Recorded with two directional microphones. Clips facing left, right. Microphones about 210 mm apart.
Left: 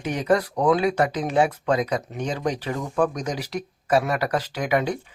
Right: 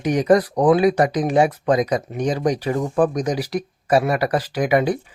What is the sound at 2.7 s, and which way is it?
Speech, 35° right (ahead or behind).